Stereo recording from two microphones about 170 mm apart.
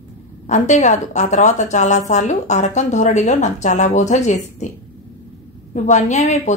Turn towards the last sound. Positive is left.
turn(degrees=40)  # may be behind; listen again after turning